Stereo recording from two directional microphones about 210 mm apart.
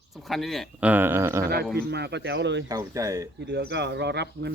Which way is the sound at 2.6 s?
15° right (ahead or behind).